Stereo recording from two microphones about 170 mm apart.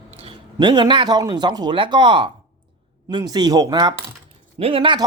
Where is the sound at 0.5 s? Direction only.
25° right (ahead or behind).